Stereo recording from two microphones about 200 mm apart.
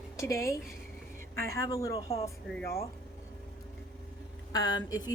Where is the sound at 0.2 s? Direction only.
15° left (ahead or behind).